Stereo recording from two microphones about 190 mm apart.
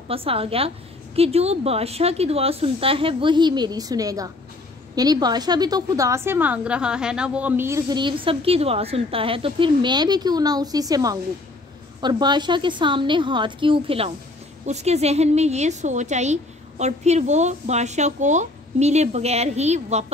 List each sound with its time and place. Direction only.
0.1 s a woman's voice: 30° right (ahead or behind)